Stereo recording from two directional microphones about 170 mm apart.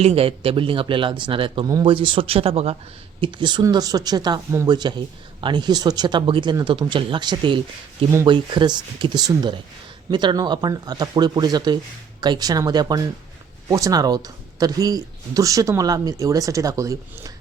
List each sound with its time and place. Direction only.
0.0 s speech: 35° right (ahead or behind); by 17.3 s 20° right (ahead or behind)